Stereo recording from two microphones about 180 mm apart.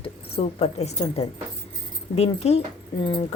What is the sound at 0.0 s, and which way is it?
A woman's voice, 35° left (ahead or behind).